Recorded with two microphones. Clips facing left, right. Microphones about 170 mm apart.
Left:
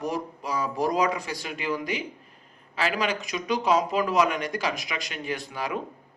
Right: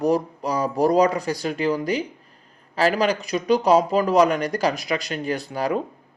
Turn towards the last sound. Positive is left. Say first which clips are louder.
# right 7 dB
turn(degrees=-35)  # may be behind; listen again after turning